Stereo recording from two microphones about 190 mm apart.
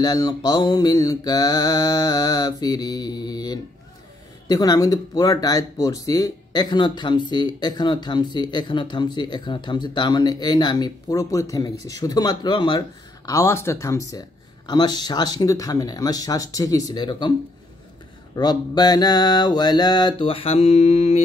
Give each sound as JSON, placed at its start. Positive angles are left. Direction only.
{"t": 0.0, "sound": "speech", "side_deg": 20}
{"t": 18.3, "sound": "speech", "side_deg": 20}